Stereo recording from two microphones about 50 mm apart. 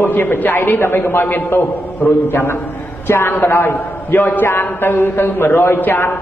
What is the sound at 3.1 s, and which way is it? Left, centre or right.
A man's voice, left.